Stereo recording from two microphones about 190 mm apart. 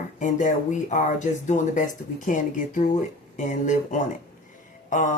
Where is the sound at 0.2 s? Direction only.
40° left (ahead or behind).